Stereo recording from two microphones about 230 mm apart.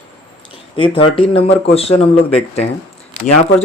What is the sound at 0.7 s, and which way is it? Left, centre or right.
Speech, left.